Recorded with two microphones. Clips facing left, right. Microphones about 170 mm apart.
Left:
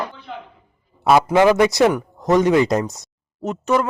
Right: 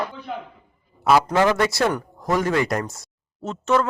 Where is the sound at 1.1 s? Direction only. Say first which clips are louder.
Left 4 dB; 15° left (ahead or behind).